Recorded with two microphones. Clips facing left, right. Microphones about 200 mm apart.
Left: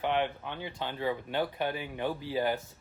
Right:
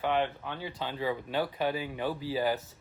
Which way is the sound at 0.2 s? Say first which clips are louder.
Right 1 dB; 15° left (ahead or behind).